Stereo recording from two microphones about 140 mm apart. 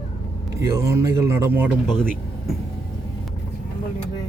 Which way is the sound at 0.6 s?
20° right (ahead or behind).